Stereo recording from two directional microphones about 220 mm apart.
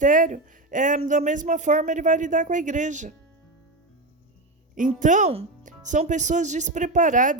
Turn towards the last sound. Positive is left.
turn(degrees=-35)  # may be behind; listen again after turning